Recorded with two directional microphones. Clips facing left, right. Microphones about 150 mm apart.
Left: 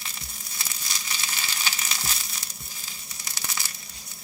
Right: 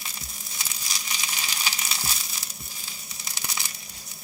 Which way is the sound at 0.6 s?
15° right (ahead or behind).